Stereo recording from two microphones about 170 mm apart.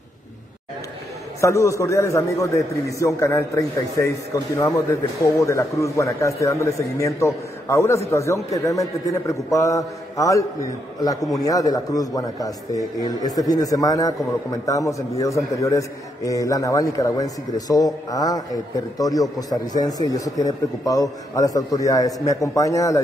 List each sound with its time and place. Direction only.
1.4 s a man's voice: 15° left (ahead or behind)